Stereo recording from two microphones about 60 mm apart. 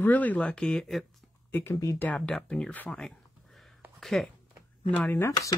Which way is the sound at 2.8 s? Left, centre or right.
Centre.